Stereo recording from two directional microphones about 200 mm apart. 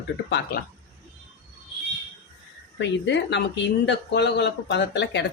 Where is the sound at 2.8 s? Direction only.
60° left (ahead or behind).